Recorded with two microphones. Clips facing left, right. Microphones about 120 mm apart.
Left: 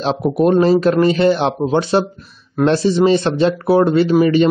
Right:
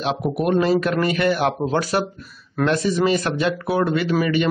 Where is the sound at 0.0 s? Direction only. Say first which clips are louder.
Left 6 dB; 30° left (ahead or behind).